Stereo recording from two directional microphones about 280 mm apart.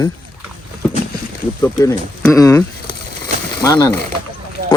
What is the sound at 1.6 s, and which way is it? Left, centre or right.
Speech, centre.